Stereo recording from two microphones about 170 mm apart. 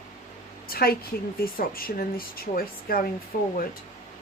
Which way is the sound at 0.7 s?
60° left (ahead or behind).